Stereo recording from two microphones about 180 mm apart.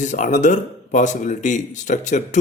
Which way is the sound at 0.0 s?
45° left (ahead or behind).